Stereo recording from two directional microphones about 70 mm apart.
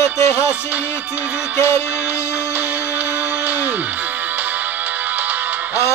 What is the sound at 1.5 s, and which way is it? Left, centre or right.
Music, left.